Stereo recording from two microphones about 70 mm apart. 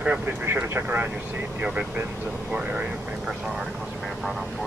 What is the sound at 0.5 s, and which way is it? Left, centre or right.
Speech, right.